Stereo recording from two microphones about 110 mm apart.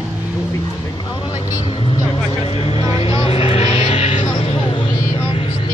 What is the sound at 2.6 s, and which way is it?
Vehicle, 60° left (ahead or behind).